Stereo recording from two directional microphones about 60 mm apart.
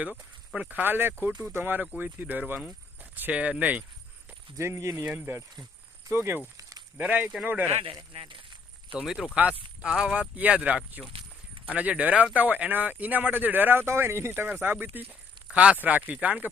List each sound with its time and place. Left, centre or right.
0.0 s speech: centre
0.7 s speech: right
3.0 s a sound: right
3.3 s speech: right
4.5 s speech: right
5.0 s speech: right
6.9 s speech: right
9.3 s speech: centre; by 15.0 s right
15.4 s speech: centre